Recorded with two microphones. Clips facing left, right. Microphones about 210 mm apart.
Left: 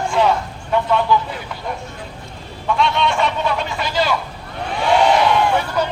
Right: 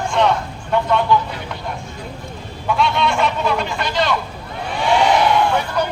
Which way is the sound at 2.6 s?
Centre (ahead or behind).